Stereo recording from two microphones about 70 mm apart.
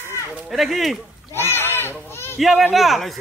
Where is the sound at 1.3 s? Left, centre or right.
Left.